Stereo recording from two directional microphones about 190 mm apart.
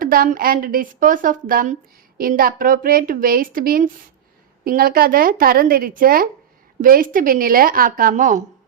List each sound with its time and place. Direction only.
0.0 s a woman's voice: 50° right (ahead or behind)